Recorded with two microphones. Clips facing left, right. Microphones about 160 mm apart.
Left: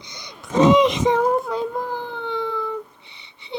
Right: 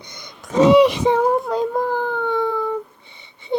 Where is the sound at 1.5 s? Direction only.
45° right (ahead or behind).